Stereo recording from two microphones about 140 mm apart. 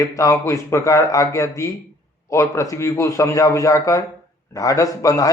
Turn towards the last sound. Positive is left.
turn(degrees=25)  # may be behind; listen again after turning